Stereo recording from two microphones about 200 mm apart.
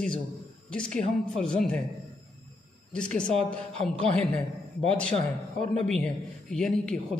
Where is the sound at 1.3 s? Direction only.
5° left (ahead or behind).